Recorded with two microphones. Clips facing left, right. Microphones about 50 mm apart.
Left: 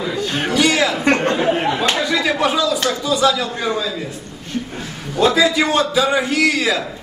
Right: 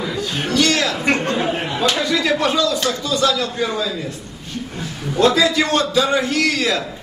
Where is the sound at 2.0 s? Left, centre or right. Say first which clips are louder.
Even; centre.